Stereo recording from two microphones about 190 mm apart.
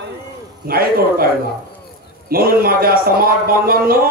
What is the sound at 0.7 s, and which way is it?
Speech, 50° right (ahead or behind).